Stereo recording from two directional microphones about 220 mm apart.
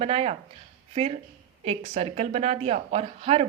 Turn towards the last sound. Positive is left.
turn(degrees=-25)  # may be behind; listen again after turning